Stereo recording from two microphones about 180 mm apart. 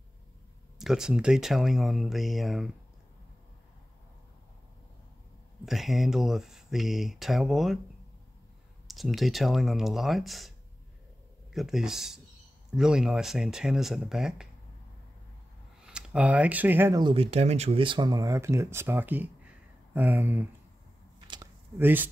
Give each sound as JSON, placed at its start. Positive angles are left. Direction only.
{"t": 0.7, "sound": "speech", "side_deg": -5}
{"t": 5.7, "sound": "speech", "side_deg": 0}
{"t": 8.8, "sound": "speech", "side_deg": 0}
{"t": 11.5, "sound": "speech", "side_deg": -5}
{"t": 15.8, "sound": "speech", "side_deg": -5}
{"t": 17.0, "sound": "speech", "side_deg": -30}
{"t": 21.3, "sound": "a sound", "side_deg": -15}